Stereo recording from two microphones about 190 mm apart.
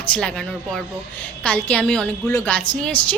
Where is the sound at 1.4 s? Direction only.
5° left (ahead or behind).